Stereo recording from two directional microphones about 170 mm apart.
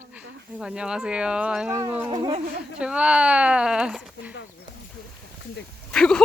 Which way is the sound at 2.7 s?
5° right (ahead or behind).